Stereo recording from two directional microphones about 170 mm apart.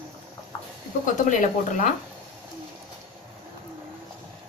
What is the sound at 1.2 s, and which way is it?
Speech, 50° left (ahead or behind).